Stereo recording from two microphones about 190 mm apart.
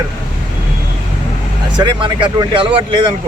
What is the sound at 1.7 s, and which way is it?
Speech, 25° right (ahead or behind).